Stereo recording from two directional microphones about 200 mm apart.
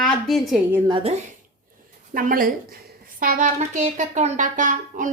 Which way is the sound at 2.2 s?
45° right (ahead or behind).